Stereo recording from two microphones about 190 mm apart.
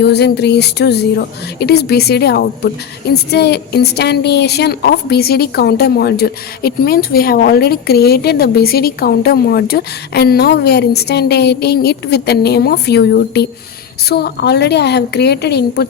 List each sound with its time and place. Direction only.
0.0 s a woman's voice: 60° left (ahead or behind)